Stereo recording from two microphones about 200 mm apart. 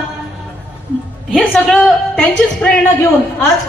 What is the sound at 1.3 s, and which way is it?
A woman's voice, 5° left (ahead or behind).